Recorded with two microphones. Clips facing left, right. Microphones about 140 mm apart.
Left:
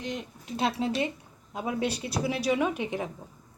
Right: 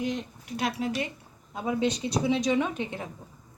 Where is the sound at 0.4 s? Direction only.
25° left (ahead or behind).